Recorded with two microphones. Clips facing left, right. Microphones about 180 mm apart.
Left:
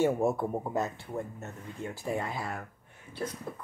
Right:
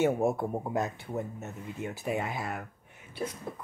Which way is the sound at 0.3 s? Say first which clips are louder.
Even; centre (ahead or behind).